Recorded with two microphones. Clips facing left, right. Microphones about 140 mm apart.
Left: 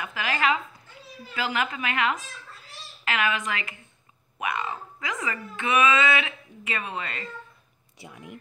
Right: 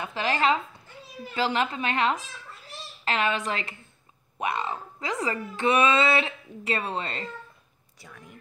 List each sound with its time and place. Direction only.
0.0 s speech: 30° right (ahead or behind)